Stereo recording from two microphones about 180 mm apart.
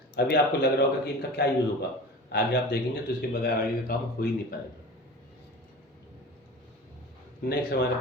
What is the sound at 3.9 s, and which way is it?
Speech, 55° left (ahead or behind).